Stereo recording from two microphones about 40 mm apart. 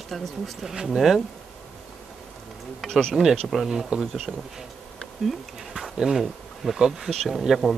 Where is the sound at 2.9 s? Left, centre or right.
Centre.